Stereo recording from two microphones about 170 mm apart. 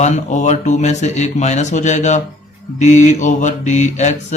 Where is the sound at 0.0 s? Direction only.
45° left (ahead or behind).